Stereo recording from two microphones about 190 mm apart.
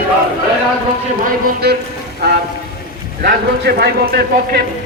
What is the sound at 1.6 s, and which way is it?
Speech, 60° right (ahead or behind).